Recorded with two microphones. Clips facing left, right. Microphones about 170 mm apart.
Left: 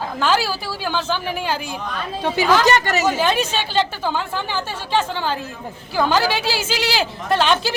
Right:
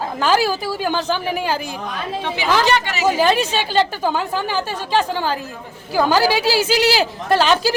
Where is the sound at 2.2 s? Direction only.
45° left (ahead or behind).